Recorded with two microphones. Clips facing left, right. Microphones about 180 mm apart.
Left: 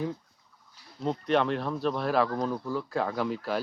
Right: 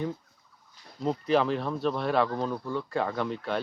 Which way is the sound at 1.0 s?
Centre (ahead or behind).